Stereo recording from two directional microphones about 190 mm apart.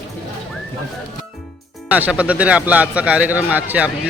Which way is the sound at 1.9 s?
5° right (ahead or behind).